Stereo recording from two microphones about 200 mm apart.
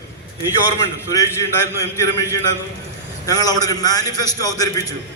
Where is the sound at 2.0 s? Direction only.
15° left (ahead or behind).